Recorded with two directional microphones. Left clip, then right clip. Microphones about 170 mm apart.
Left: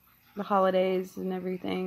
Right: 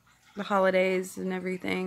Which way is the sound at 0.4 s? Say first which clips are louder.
Right 1 dB; 20° right (ahead or behind).